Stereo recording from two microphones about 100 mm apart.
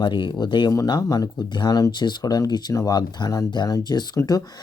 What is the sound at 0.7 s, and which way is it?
Speech, 35° left (ahead or behind).